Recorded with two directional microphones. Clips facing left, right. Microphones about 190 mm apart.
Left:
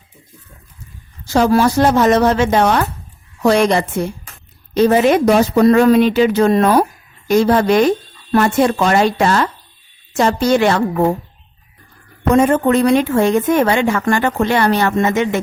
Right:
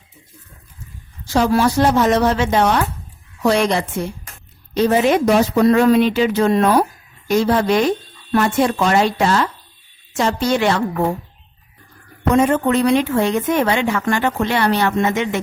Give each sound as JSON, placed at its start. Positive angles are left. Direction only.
{"t": 1.2, "sound": "a woman's voice", "side_deg": 45}
{"t": 12.3, "sound": "a woman's voice", "side_deg": 45}